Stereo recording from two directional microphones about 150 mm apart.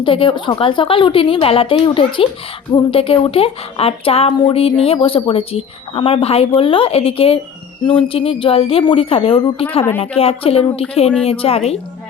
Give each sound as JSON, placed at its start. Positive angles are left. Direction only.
{"t": 0.0, "sound": "speech", "side_deg": 35}